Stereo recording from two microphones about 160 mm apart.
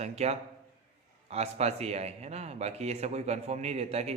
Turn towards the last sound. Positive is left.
turn(degrees=-40)  # may be behind; listen again after turning